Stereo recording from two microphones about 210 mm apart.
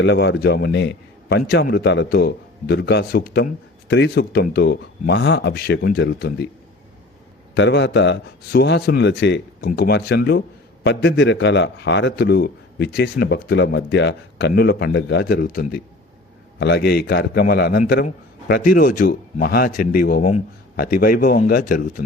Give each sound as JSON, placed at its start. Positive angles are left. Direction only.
{"t": 0.0, "sound": "a man's voice", "side_deg": 55}
{"t": 7.5, "sound": "a man's voice", "side_deg": 60}